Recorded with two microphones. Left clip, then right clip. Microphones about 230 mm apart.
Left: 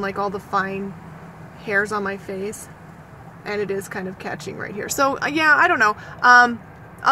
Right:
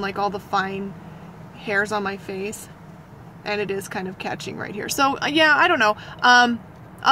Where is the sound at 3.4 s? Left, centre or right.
Centre.